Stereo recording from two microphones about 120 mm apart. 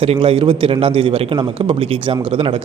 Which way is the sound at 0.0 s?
50° right (ahead or behind).